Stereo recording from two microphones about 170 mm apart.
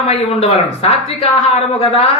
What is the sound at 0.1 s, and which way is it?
Speech, 35° left (ahead or behind).